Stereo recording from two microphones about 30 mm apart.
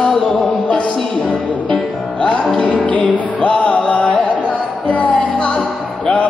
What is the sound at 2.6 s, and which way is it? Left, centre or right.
Music, left.